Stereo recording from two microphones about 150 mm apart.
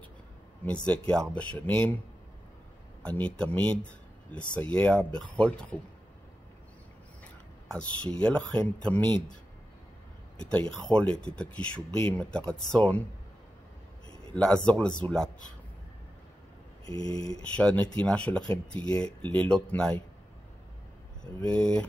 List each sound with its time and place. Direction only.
0.8 s speech: 10° left (ahead or behind)
3.0 s speech: 10° left (ahead or behind)
7.6 s speech: 5° left (ahead or behind)
10.5 s speech: 5° left (ahead or behind)
14.3 s speech: 5° left (ahead or behind)
16.8 s a sound: 25° left (ahead or behind)
17.4 s speech: 10° left (ahead or behind)